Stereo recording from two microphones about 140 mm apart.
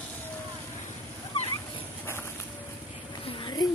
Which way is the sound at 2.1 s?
15° left (ahead or behind).